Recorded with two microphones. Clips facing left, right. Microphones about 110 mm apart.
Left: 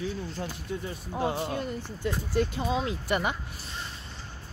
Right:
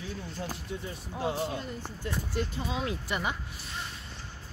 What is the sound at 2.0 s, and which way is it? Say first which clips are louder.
A man's voice: left 6 dB; 75° left (ahead or behind).